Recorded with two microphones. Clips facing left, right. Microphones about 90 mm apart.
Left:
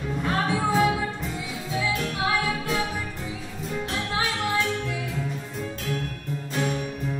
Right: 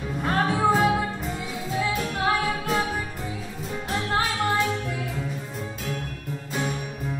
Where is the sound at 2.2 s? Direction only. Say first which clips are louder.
Right 2 dB; 45° right (ahead or behind).